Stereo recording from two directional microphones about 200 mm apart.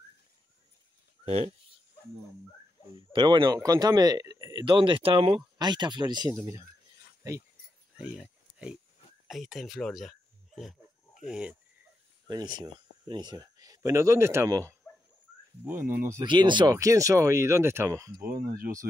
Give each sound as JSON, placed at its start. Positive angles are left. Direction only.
{"t": 1.2, "sound": "speech", "side_deg": -35}
{"t": 3.1, "sound": "speech", "side_deg": -20}
{"t": 8.0, "sound": "a sound", "side_deg": -5}
{"t": 9.3, "sound": "speech", "side_deg": 0}
{"t": 12.3, "sound": "speech", "side_deg": -20}
{"t": 16.1, "sound": "speech", "side_deg": -20}
{"t": 18.2, "sound": "speech", "side_deg": -45}